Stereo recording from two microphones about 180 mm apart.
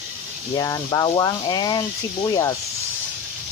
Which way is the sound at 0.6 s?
20° left (ahead or behind).